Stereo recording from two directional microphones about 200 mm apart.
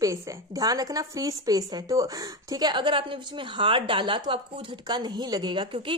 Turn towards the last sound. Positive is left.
turn(degrees=-25)  # may be behind; listen again after turning